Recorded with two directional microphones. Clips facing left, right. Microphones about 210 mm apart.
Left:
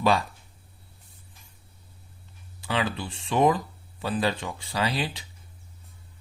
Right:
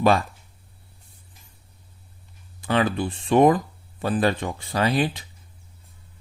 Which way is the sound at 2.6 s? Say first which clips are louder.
Right 6 dB; 50° right (ahead or behind).